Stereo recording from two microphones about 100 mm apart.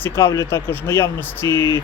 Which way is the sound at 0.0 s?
30° left (ahead or behind).